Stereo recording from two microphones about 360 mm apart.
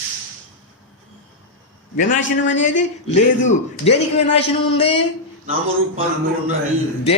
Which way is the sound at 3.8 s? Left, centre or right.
Centre.